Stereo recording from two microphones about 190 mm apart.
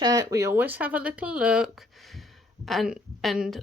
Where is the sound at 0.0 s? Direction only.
20° right (ahead or behind).